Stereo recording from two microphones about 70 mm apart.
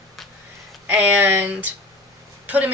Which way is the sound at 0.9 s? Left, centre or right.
Right.